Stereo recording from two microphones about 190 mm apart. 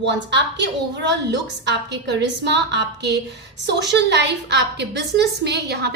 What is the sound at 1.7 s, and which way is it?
A woman's voice, 65° right (ahead or behind).